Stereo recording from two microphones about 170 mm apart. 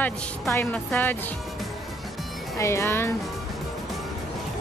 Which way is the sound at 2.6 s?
15° left (ahead or behind).